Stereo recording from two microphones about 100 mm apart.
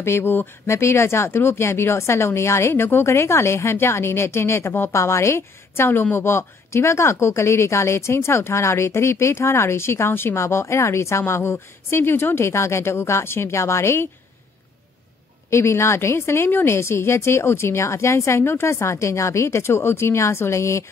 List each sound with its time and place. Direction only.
0.0 s speech: 25° left (ahead or behind)
15.5 s speech: 25° left (ahead or behind)